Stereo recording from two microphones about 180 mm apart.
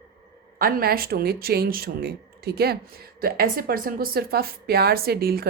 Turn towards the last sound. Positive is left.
turn(degrees=-55)  # may be behind; listen again after turning